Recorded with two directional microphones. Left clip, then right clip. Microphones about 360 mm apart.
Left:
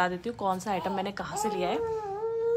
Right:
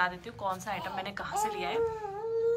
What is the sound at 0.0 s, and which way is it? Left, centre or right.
A woman's voice, centre.